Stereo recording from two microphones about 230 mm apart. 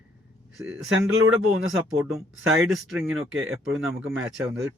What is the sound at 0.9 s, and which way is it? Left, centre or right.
Speech, right.